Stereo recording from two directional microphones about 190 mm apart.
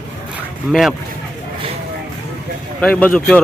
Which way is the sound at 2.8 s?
5° left (ahead or behind).